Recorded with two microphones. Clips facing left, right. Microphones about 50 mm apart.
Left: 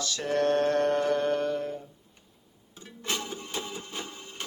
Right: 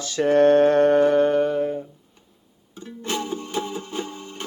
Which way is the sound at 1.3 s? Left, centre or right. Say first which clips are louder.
Right 8 dB; centre.